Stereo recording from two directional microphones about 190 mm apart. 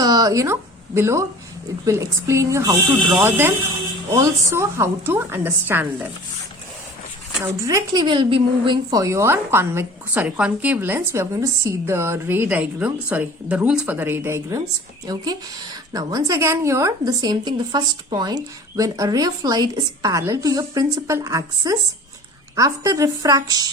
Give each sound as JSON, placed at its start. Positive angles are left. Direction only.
{"t": 0.0, "sound": "a woman's voice", "side_deg": -20}
{"t": 7.4, "sound": "a woman's voice", "side_deg": -15}